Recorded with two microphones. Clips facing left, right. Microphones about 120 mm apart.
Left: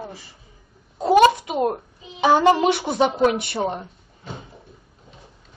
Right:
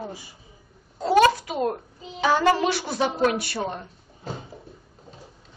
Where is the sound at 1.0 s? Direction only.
20° left (ahead or behind).